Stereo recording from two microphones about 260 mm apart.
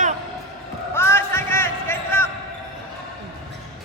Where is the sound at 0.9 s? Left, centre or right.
Centre.